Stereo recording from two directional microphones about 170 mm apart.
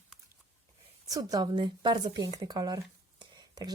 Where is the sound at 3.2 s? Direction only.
25° right (ahead or behind).